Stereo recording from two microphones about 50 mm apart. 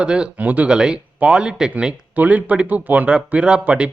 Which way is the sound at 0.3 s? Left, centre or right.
Right.